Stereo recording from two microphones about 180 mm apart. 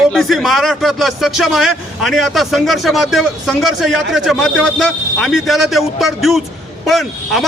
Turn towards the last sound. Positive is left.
turn(degrees=0)  # may be behind; listen again after turning